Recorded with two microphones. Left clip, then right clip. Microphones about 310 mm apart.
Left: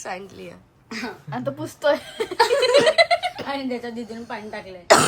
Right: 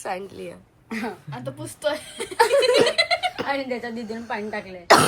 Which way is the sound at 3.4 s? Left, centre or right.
Right.